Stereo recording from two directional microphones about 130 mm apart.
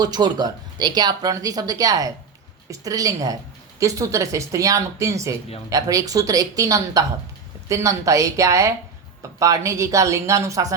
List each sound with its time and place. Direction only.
0.0 s speech: 30° right (ahead or behind)